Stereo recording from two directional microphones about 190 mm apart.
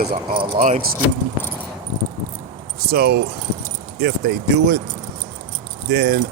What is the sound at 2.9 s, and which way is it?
Speech, 55° right (ahead or behind).